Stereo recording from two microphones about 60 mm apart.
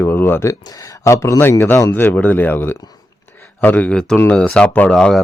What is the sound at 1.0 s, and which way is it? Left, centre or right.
Speech, left.